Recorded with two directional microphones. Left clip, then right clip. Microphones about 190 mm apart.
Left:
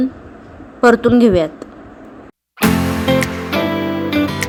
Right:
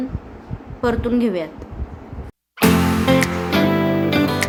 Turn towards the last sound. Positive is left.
turn(degrees=0)  # may be behind; listen again after turning